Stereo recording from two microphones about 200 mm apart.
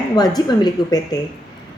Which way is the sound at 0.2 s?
20° left (ahead or behind).